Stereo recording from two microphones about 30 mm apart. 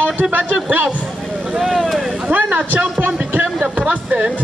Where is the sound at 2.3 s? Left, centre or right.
Right.